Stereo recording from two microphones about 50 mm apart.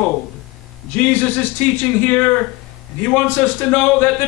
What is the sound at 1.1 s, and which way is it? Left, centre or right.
Speech, left.